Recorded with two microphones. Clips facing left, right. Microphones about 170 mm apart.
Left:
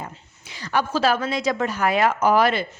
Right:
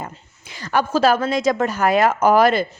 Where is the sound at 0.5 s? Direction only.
50° right (ahead or behind).